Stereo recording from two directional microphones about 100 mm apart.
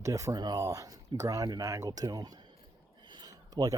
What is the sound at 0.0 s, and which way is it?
Speech, 35° right (ahead or behind).